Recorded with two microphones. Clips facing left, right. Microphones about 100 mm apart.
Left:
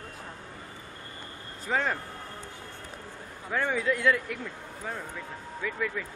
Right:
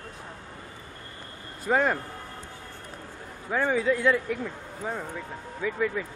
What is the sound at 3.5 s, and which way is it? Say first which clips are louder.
A man's voice: right 3 dB; 15° right (ahead or behind).